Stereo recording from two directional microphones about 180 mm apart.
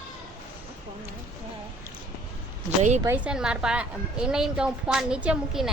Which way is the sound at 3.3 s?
5° right (ahead or behind).